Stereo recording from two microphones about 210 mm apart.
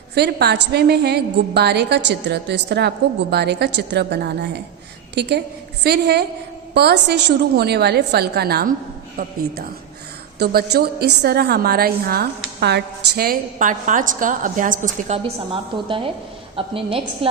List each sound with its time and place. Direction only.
0.1 s a woman's voice: 50° right (ahead or behind)
10.3 s a woman's voice: 50° right (ahead or behind); by 17.0 s 25° right (ahead or behind)